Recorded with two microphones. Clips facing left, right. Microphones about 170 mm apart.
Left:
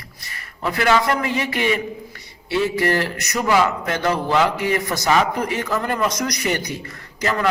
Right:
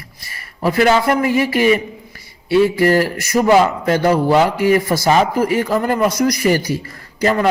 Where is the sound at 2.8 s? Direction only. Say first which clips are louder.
Right 6 dB; 30° right (ahead or behind).